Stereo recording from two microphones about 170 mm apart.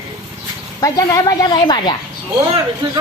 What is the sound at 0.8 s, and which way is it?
A woman's voice, 20° left (ahead or behind).